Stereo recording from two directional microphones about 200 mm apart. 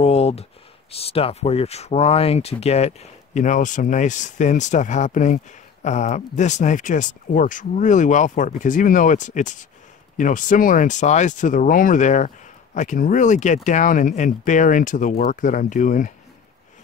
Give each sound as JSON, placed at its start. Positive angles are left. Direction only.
{"t": 0.0, "sound": "speech", "side_deg": 30}